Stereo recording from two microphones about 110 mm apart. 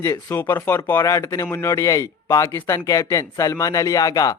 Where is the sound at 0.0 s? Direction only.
25° left (ahead or behind).